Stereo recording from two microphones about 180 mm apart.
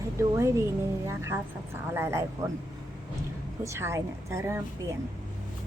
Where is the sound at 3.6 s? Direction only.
15° right (ahead or behind).